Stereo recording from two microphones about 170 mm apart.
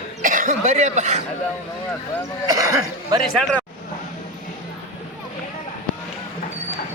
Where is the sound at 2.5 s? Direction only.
20° right (ahead or behind).